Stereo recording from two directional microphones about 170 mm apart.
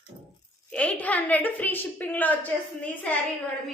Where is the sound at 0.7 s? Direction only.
10° left (ahead or behind).